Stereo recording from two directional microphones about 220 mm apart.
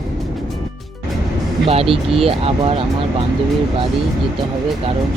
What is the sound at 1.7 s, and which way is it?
Speech, 25° right (ahead or behind).